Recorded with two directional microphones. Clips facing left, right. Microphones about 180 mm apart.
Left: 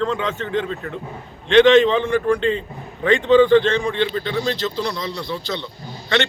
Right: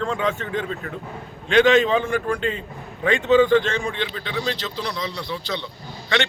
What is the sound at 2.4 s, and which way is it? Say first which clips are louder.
Speech: left 5 dB; 30° left (ahead or behind).